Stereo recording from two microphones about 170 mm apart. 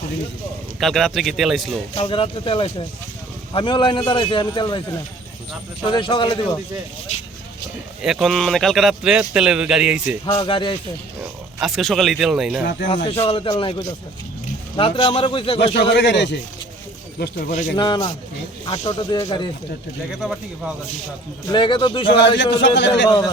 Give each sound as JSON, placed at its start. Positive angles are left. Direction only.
{"t": 0.8, "sound": "speech", "side_deg": 0}
{"t": 2.0, "sound": "a man's voice", "side_deg": 30}
{"t": 8.0, "sound": "speech", "side_deg": 0}
{"t": 10.2, "sound": "a man's voice", "side_deg": 25}
{"t": 11.6, "sound": "speech", "side_deg": 0}
{"t": 13.1, "sound": "a man's voice", "side_deg": 35}
{"t": 15.9, "sound": "speech", "side_deg": 90}
{"t": 17.5, "sound": "speech", "side_deg": 50}
{"t": 17.7, "sound": "a man's voice", "side_deg": 25}
{"t": 21.5, "sound": "a man's voice", "side_deg": 30}
{"t": 22.0, "sound": "speech", "side_deg": 90}
{"t": 23.0, "sound": "a man's voice", "side_deg": 25}